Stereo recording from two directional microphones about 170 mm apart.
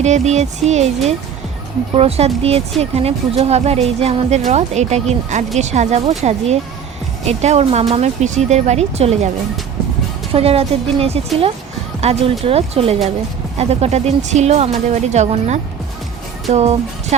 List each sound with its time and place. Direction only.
0.0 s speech: 40° right (ahead or behind)
10.3 s speech: 35° right (ahead or behind)
16.5 s music: 40° right (ahead or behind)